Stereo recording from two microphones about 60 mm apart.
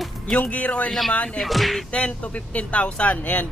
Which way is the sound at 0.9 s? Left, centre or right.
Centre.